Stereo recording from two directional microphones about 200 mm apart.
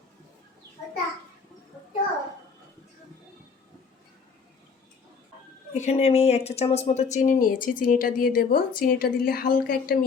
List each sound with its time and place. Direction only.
5.7 s speech: 35° left (ahead or behind)